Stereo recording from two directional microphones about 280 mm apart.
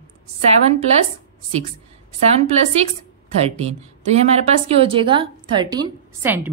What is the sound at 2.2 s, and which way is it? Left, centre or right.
Speech, right.